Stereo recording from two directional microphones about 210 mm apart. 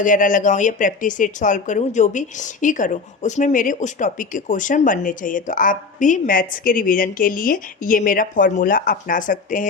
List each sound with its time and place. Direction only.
0.0 s speech: 40° left (ahead or behind)